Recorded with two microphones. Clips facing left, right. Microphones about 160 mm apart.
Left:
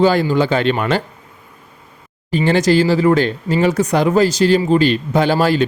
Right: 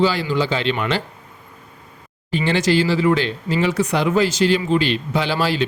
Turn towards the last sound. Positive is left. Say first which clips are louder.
# left 6 dB
turn(degrees=45)  # may be behind; listen again after turning